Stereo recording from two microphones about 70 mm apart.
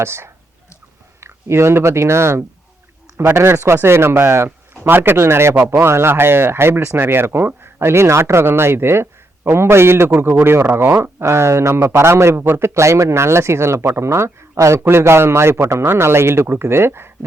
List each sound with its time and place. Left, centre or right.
0.0 s speech: right